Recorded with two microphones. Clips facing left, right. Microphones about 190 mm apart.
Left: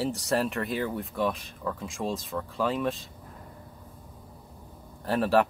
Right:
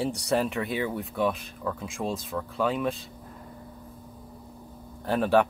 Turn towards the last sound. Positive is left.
turn(degrees=0)  # may be behind; listen again after turning